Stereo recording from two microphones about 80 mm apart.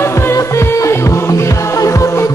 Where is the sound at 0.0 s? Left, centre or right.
Left.